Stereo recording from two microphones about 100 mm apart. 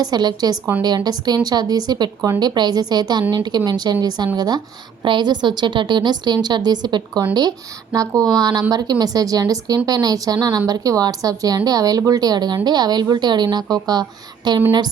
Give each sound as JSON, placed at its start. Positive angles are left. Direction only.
{"t": 0.0, "sound": "a woman's voice", "side_deg": -45}
{"t": 8.4, "sound": "a woman's voice", "side_deg": -40}